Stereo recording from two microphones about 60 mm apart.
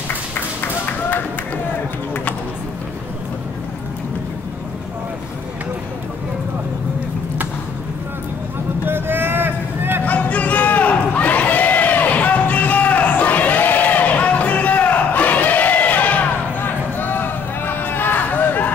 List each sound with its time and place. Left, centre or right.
0.1 s music: left
8.8 s vehicle: right
10.0 s a sound: left